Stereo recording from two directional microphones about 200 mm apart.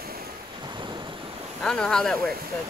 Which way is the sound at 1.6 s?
5° left (ahead or behind).